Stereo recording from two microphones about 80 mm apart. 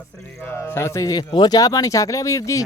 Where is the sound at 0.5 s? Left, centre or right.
Left.